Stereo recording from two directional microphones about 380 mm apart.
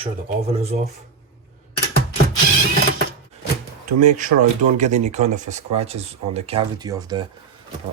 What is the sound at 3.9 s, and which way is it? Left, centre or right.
Speech, centre.